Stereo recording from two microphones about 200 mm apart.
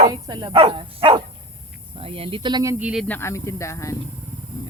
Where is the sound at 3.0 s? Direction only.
10° left (ahead or behind).